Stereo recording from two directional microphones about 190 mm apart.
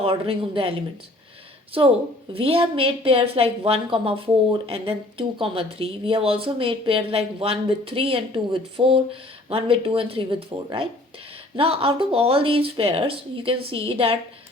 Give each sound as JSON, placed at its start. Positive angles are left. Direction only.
{"t": 0.0, "sound": "a woman's voice", "side_deg": -30}
{"t": 1.7, "sound": "a woman's voice", "side_deg": -30}